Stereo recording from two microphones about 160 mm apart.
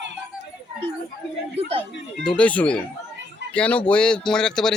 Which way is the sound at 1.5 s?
35° right (ahead or behind).